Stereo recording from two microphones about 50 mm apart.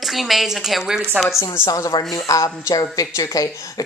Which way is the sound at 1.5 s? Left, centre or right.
Left.